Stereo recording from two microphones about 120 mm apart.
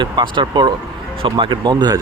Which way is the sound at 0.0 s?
40° right (ahead or behind).